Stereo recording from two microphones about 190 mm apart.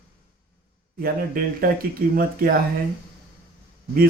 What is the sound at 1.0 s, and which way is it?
Speech, 50° right (ahead or behind).